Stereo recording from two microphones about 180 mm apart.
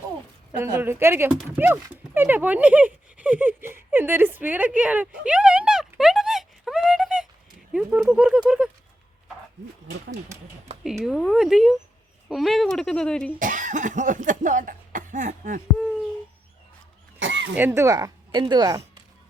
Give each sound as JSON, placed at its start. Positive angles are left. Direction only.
{"t": 0.5, "sound": "speech", "side_deg": -10}
{"t": 10.8, "sound": "speech", "side_deg": 0}
{"t": 13.4, "sound": "speech", "side_deg": -45}
{"t": 17.2, "sound": "a sound", "side_deg": -90}
{"t": 17.5, "sound": "speech", "side_deg": -10}